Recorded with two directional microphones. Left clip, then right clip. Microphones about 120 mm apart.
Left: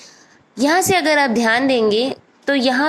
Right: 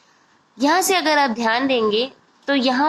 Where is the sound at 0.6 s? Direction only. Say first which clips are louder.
Left 2 dB; 45° left (ahead or behind).